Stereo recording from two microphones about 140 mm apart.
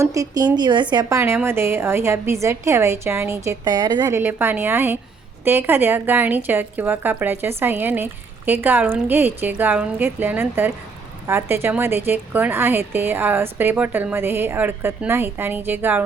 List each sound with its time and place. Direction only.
0.0 s a woman's voice: 25° right (ahead or behind)
1.2 s a woman's voice: 15° right (ahead or behind)
4.1 s speech: 15° right (ahead or behind)